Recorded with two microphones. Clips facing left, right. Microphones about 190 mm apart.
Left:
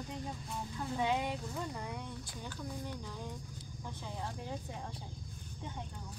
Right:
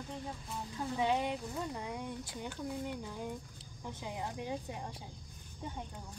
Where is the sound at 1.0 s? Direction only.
5° right (ahead or behind).